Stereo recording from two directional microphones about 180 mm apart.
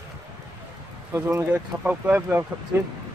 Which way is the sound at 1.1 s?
15° right (ahead or behind).